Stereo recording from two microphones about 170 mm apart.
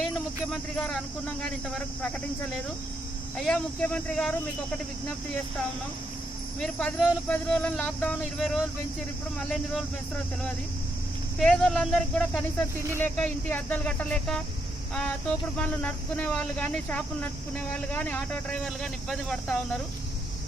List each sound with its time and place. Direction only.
0.5 s speech: 5° left (ahead or behind)
3.4 s speech: 5° left (ahead or behind)
6.6 s speech: 5° left (ahead or behind)
11.3 s speech: 5° left (ahead or behind)